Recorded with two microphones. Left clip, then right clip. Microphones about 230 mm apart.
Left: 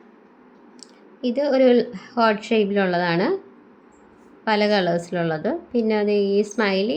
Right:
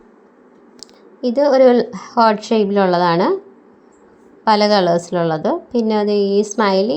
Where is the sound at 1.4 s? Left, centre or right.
Centre.